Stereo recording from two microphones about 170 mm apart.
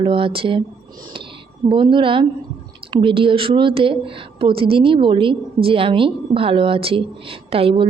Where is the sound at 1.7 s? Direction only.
30° right (ahead or behind).